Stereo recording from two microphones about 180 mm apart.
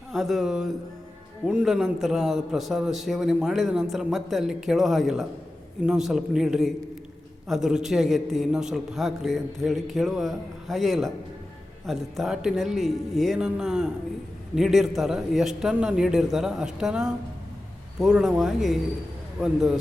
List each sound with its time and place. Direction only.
0.1 s a man's voice: centre (ahead or behind)